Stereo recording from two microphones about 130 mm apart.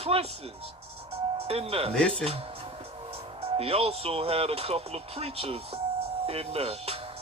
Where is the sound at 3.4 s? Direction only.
50° right (ahead or behind).